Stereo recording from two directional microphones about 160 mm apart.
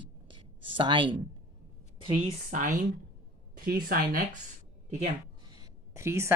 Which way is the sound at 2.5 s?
55° right (ahead or behind).